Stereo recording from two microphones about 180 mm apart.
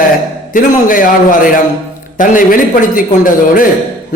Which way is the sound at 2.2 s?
50° left (ahead or behind).